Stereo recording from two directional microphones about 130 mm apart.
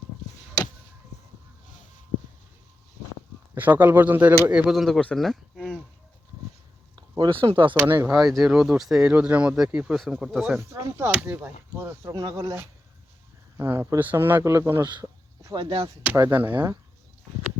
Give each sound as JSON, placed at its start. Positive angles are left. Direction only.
{"t": 3.5, "sound": "speech", "side_deg": -15}
{"t": 4.7, "sound": "speech", "side_deg": 0}
{"t": 6.9, "sound": "speech", "side_deg": -40}
{"t": 7.9, "sound": "speech", "side_deg": -15}
{"t": 8.1, "sound": "speech", "side_deg": 0}
{"t": 10.6, "sound": "speech", "side_deg": -20}
{"t": 15.4, "sound": "speech", "side_deg": -35}
{"t": 16.1, "sound": "speech", "side_deg": -25}
{"t": 16.4, "sound": "speech", "side_deg": -15}